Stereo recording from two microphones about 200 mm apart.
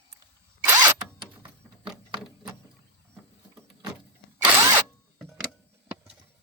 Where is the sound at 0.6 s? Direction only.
15° right (ahead or behind).